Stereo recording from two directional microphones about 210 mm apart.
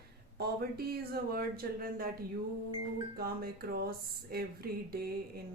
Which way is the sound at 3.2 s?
45° right (ahead or behind).